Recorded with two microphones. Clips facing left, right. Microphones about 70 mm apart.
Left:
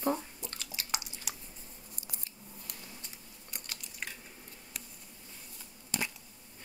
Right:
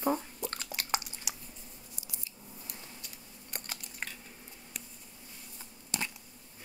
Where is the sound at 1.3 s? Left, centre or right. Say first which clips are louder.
Right 1 dB; centre.